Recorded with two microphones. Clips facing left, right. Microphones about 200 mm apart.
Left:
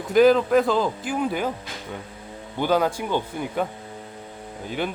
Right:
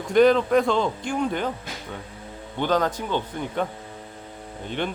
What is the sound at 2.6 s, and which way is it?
Speech, 10° left (ahead or behind).